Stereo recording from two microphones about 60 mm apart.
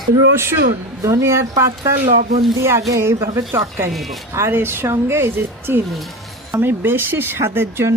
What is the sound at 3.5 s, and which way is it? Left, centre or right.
Speech, right.